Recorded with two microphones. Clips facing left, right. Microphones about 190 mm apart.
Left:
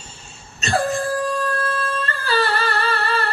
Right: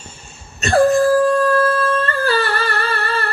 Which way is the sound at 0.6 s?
55° right (ahead or behind).